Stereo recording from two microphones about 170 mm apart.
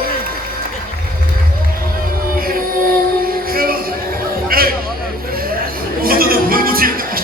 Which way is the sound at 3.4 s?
60° right (ahead or behind).